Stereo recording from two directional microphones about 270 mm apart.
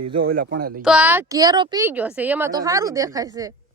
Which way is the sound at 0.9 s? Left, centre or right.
Centre.